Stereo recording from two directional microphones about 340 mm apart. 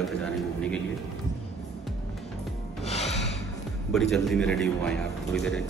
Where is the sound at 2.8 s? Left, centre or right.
Centre.